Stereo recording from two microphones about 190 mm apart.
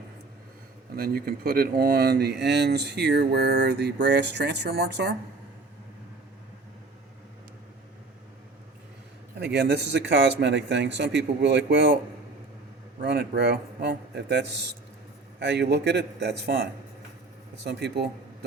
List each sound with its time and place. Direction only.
0.9 s speech: 50° right (ahead or behind)
9.4 s speech: 65° right (ahead or behind)
13.0 s speech: 60° right (ahead or behind)